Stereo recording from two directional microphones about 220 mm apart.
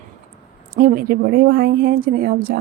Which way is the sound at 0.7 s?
40° right (ahead or behind).